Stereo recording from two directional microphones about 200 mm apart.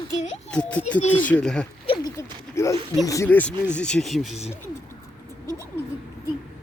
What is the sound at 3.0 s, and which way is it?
A child's voice, 15° left (ahead or behind).